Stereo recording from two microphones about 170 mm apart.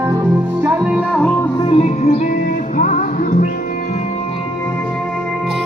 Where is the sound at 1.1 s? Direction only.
10° left (ahead or behind).